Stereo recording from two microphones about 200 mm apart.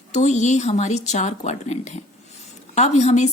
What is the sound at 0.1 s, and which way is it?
A woman's voice, 35° left (ahead or behind).